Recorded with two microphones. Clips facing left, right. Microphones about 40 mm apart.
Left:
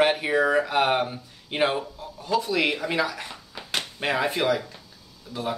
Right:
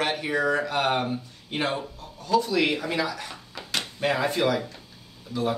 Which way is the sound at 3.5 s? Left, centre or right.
Left.